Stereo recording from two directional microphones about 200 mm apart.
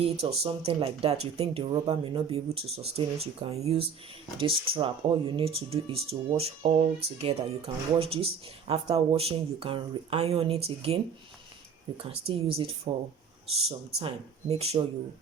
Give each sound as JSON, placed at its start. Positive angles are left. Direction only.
{"t": 0.0, "sound": "speech", "side_deg": -30}